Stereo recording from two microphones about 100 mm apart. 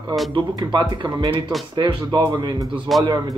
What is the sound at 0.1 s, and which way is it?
Speech, 45° right (ahead or behind).